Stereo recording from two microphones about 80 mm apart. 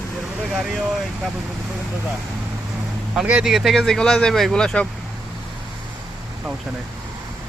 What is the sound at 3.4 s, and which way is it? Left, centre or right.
Speech, centre.